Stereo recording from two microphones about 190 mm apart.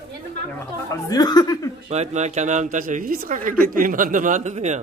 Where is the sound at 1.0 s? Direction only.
20° left (ahead or behind).